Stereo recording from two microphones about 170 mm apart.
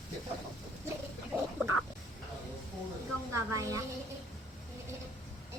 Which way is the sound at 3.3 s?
20° right (ahead or behind).